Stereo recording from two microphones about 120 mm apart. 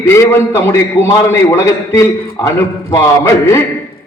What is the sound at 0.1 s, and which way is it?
A man's voice, 20° left (ahead or behind).